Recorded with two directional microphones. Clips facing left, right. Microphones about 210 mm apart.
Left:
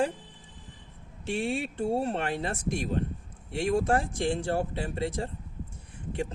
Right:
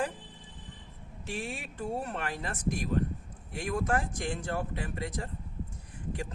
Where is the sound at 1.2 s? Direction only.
25° left (ahead or behind).